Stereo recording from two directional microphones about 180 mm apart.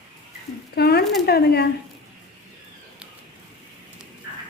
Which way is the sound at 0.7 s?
60° left (ahead or behind).